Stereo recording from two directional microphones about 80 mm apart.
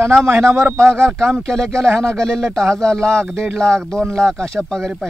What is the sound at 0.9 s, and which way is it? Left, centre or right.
Speech, centre.